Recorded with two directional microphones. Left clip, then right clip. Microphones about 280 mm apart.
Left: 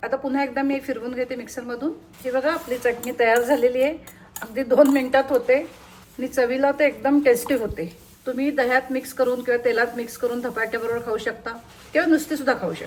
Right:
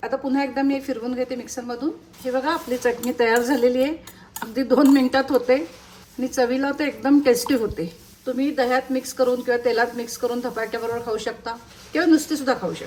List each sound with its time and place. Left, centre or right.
0.0 s speech: centre